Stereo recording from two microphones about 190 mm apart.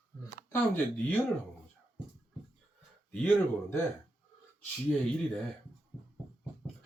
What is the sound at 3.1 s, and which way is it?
Speech, 10° left (ahead or behind).